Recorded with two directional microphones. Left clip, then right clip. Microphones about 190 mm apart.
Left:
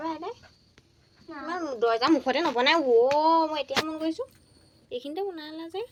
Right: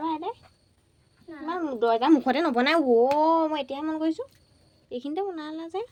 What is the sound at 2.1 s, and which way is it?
Speech, 45° right (ahead or behind).